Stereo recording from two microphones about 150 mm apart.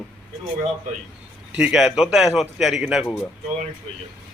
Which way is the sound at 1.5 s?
5° right (ahead or behind).